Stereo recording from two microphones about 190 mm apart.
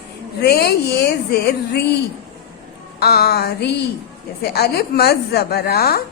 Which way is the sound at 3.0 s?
55° left (ahead or behind).